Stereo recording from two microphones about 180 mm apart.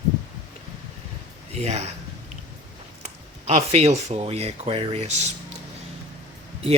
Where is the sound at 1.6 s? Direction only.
35° right (ahead or behind).